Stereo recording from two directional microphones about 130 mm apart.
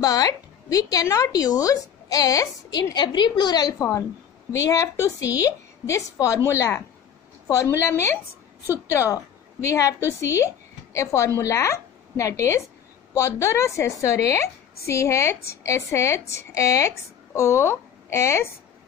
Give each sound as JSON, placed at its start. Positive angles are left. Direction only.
{"t": 0.0, "sound": "a woman's voice", "side_deg": 30}
{"t": 8.9, "sound": "a woman's voice", "side_deg": 20}